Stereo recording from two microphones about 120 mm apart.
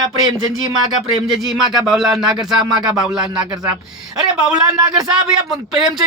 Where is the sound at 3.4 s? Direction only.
35° right (ahead or behind).